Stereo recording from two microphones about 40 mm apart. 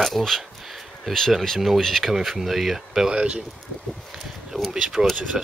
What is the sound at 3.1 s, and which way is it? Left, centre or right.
Speech, right.